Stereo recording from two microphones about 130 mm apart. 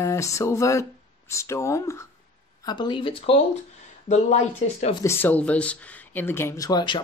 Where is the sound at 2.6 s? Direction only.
35° left (ahead or behind).